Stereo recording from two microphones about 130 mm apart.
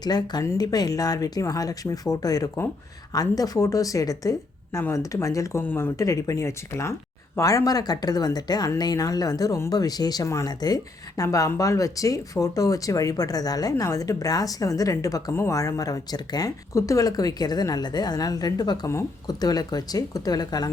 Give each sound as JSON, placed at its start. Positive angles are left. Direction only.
{"t": 0.0, "sound": "speech", "side_deg": 30}